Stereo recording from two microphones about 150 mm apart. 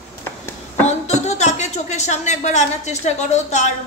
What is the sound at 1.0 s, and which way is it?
A woman's voice, 50° left (ahead or behind).